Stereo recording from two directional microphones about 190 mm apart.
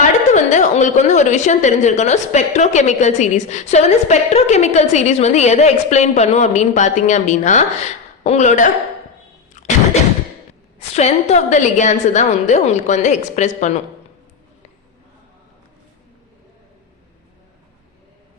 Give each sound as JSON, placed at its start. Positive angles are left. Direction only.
{"t": 0.0, "sound": "a woman's voice", "side_deg": 40}
{"t": 10.8, "sound": "a woman's voice", "side_deg": 35}